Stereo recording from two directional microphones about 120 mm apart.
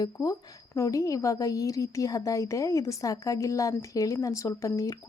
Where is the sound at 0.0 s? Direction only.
30° left (ahead or behind).